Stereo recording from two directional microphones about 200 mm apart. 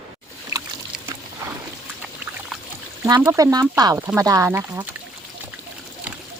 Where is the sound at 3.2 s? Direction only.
15° right (ahead or behind).